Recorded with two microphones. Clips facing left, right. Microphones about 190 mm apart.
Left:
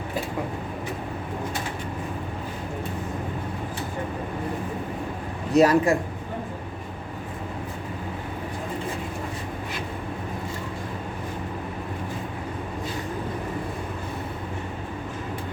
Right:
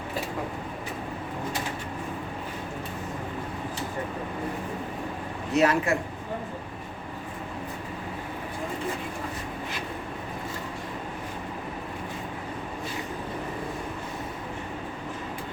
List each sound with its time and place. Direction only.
5.5 s a man's voice: 35° left (ahead or behind)